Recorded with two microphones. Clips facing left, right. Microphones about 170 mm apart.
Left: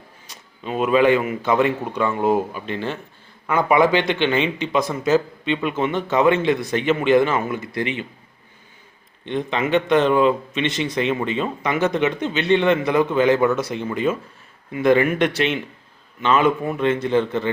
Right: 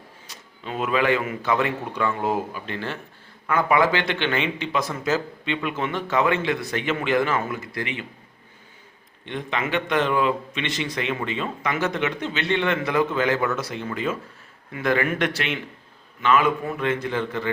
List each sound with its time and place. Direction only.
0.3 s speech: 20° left (ahead or behind)
9.2 s speech: 25° left (ahead or behind)